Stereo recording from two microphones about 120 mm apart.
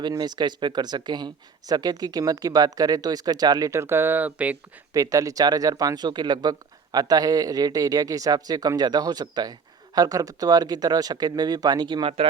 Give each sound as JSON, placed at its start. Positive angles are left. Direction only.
{"t": 0.1, "sound": "speech", "side_deg": -35}
{"t": 4.9, "sound": "speech", "side_deg": -30}
{"t": 12.0, "sound": "speech", "side_deg": -50}